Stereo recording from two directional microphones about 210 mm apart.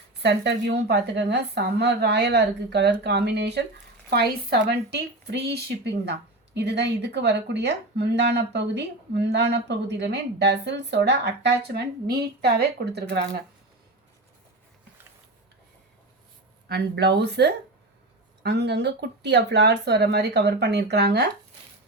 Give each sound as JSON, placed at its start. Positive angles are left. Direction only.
{"t": 0.2, "sound": "speech", "side_deg": -55}
{"t": 16.6, "sound": "speech", "side_deg": -50}